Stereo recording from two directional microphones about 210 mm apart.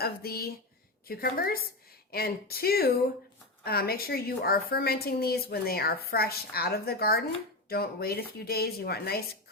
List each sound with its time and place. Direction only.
0.0 s a woman's voice: 45° left (ahead or behind)